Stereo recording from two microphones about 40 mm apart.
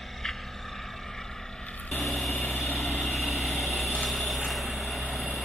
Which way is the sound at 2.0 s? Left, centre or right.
Centre.